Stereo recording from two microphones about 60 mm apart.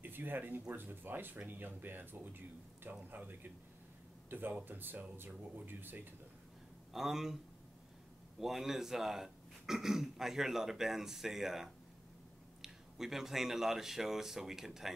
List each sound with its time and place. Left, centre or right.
0.0 s speech: right
6.9 s speech: centre
8.4 s speech: centre